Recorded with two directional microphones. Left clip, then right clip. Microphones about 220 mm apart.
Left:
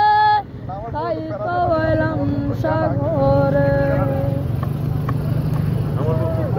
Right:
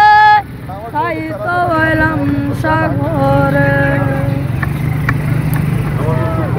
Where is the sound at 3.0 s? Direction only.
20° right (ahead or behind).